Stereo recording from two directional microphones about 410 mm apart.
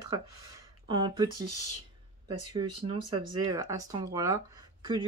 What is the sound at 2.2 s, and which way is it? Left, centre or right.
Speech, centre.